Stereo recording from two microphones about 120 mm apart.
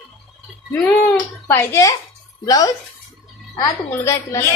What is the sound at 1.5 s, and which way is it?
A woman's voice, 20° left (ahead or behind).